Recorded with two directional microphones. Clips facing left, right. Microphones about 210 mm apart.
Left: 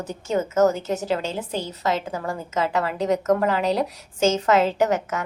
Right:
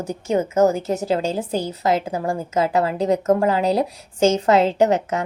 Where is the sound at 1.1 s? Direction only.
40° right (ahead or behind).